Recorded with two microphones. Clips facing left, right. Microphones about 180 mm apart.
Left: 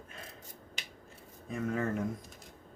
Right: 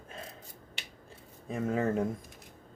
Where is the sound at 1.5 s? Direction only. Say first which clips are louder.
Right 3 dB; 30° right (ahead or behind).